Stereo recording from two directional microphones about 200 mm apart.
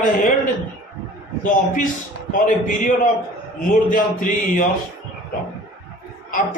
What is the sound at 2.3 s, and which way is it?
Speech, 40° left (ahead or behind).